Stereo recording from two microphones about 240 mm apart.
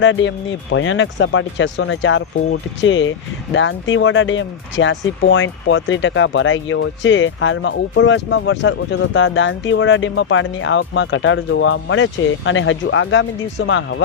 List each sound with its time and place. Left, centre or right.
0.0 s speech: left